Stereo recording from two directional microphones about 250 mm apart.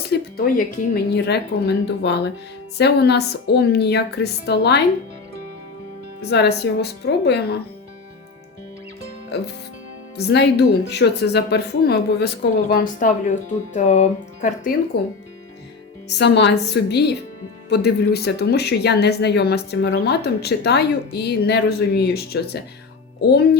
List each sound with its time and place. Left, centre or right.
0.1 s speech: left
6.3 s speech: left
10.2 s speech: left
16.0 s speech: left